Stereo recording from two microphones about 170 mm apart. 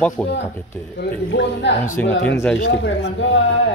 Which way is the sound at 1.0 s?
90° left.